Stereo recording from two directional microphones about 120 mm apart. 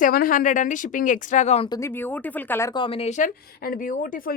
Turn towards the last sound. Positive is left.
turn(degrees=90)